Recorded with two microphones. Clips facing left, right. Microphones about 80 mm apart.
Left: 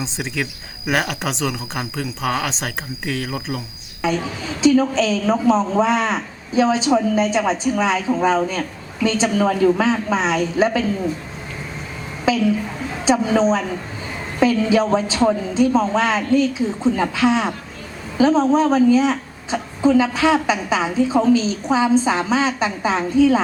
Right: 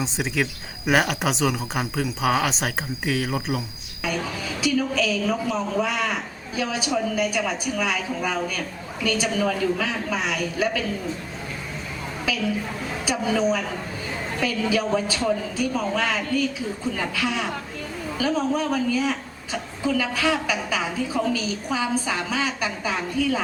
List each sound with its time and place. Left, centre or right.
0.0 s speech: centre
4.6 s a woman's voice: left
12.3 s a woman's voice: left